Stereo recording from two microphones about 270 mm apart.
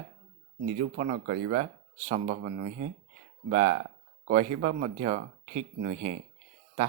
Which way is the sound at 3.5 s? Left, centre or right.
Right.